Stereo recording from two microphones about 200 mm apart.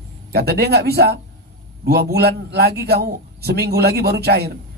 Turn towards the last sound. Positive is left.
turn(degrees=-55)  # may be behind; listen again after turning